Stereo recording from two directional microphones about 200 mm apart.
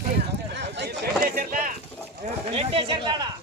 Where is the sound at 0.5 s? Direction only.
55° right (ahead or behind).